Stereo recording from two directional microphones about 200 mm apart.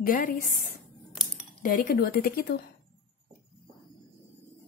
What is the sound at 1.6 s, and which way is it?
Speech, 45° left (ahead or behind).